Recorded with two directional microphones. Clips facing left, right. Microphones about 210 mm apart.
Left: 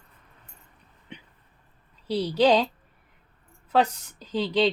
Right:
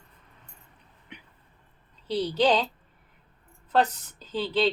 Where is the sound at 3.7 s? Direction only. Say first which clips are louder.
Left 1 dB; 10° left (ahead or behind).